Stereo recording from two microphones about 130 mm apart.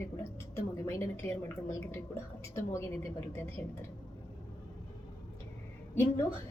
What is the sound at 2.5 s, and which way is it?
Speech, 20° left (ahead or behind).